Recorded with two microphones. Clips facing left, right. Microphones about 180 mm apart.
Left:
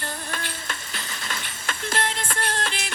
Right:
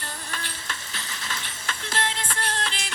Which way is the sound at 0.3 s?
50° left (ahead or behind).